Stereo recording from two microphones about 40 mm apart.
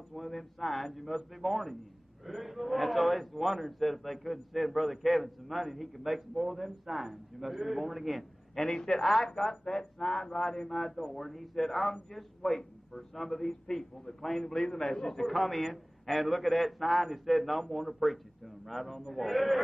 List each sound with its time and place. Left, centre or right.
0.1 s a man's voice: centre
10.7 s a man's voice: centre
15.1 s a man's voice: centre